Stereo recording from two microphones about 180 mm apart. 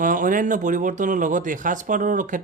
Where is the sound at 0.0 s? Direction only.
45° right (ahead or behind).